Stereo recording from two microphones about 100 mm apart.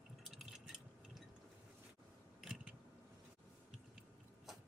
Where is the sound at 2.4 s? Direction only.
5° right (ahead or behind).